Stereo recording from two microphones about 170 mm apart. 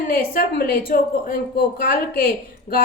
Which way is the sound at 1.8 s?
60° left (ahead or behind).